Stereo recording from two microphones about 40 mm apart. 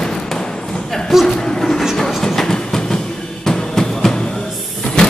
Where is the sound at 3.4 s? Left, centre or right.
Centre.